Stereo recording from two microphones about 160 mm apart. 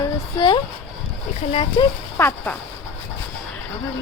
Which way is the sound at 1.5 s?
35° left (ahead or behind).